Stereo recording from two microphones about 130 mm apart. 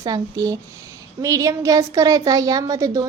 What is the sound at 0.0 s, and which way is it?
A woman's voice, 30° right (ahead or behind).